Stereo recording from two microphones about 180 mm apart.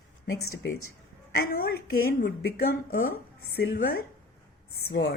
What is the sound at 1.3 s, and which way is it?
A woman's voice, 60° left (ahead or behind).